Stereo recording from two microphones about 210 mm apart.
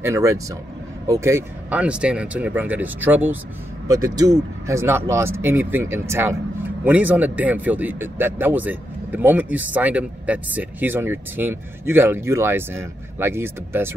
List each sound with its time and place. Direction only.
0.0 s speech: 15° right (ahead or behind)